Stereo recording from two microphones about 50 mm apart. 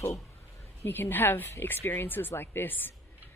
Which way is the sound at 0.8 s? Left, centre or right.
Left.